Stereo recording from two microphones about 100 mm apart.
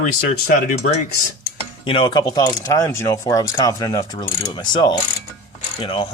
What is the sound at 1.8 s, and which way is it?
Mechanisms, 60° left (ahead or behind).